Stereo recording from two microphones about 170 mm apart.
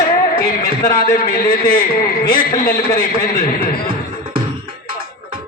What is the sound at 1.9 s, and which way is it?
Speech, 60° left (ahead or behind).